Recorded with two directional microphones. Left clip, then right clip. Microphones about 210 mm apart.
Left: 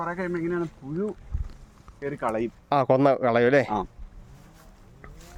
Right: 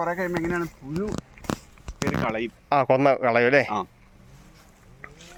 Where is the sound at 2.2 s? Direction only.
35° left (ahead or behind).